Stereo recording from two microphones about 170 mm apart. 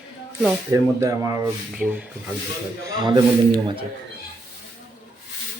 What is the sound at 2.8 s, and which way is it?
Speech, 25° right (ahead or behind).